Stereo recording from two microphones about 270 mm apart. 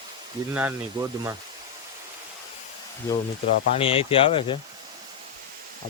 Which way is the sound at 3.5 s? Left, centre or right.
Left.